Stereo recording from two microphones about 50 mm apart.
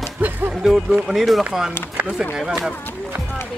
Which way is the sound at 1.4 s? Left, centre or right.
Centre.